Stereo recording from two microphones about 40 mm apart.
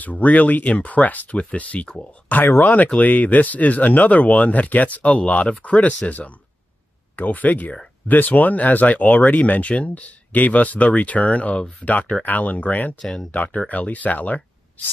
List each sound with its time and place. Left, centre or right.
0.0 s speech: left
13.0 s speech: centre
13.3 s speech: left